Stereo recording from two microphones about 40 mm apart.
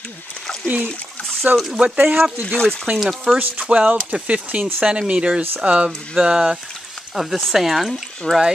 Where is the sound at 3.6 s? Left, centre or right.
Right.